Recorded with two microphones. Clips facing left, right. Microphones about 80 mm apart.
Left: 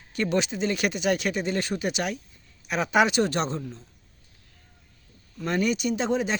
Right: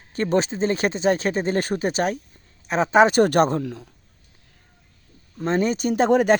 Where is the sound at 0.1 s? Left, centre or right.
Right.